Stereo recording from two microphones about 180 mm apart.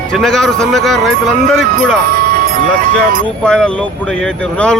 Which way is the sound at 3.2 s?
5° left (ahead or behind).